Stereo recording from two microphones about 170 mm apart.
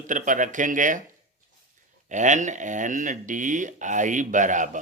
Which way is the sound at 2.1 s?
45° right (ahead or behind).